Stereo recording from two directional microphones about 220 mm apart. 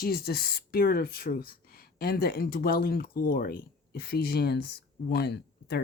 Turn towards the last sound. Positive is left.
turn(degrees=45)  # may be behind; listen again after turning